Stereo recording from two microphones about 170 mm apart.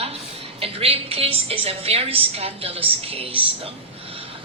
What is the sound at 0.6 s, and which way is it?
A woman's voice, 35° right (ahead or behind).